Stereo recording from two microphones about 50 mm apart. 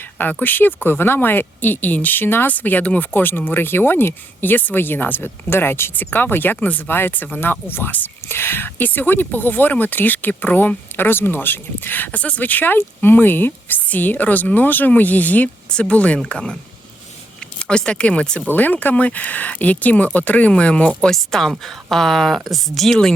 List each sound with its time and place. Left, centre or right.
0.2 s speech: left
2.5 s speech: left
3.1 s speech: left
8.8 s speech: left
12.1 s speech: left
16.2 s speech: centre
17.6 s speech: left
18.4 s speech: left
21.2 s speech: centre